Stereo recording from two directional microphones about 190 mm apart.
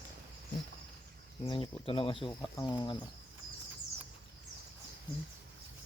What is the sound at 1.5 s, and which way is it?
Speech, 30° left (ahead or behind).